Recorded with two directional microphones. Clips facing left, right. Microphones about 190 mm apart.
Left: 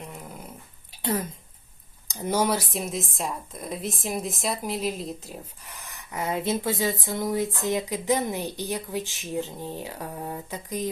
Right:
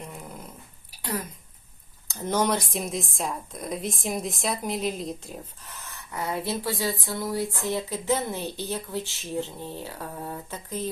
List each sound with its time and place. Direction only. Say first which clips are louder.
0.0 s dog: even; centre (ahead or behind)
0.9 s a sound: left 4 dB; 25° left (ahead or behind)
2.0 s speech: even; 10° left (ahead or behind)
5.6 s speech: even; 15° left (ahead or behind)